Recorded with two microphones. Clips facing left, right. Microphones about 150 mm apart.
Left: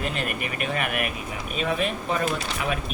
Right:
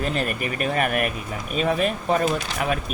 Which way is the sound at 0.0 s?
40° right (ahead or behind).